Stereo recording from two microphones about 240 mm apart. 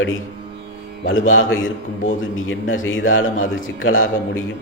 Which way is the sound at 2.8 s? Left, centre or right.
Left.